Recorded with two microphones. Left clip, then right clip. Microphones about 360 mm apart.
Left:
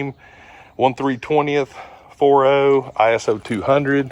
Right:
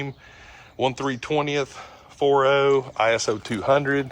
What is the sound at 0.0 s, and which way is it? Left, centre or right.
Speech, centre.